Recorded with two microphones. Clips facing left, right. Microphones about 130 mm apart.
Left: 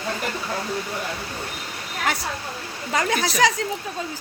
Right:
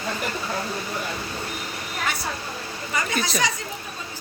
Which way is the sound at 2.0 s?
90° left.